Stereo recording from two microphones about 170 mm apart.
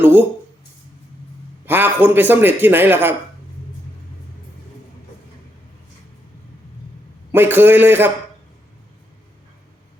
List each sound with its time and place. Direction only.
0.0 s speech: 10° right (ahead or behind)
1.6 s a man's voice: 10° right (ahead or behind)
7.3 s a man's voice: 10° right (ahead or behind)